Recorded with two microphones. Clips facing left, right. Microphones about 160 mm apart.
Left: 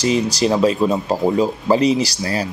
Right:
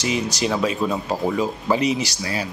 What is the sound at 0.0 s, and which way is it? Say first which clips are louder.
Speech: left 6 dB; 35° left (ahead or behind).